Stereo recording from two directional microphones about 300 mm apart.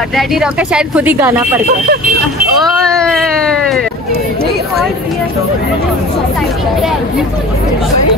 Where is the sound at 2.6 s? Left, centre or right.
Centre.